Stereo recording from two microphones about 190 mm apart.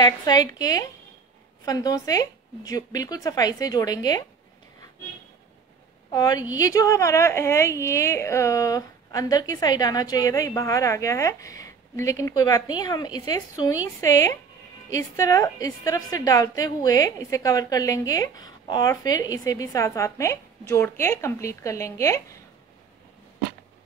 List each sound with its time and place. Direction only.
0.0 s a woman's voice: 20° left (ahead or behind)
6.1 s a woman's voice: 20° left (ahead or behind)